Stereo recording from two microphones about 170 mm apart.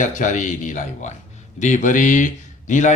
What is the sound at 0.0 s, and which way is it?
Speech, 50° left (ahead or behind).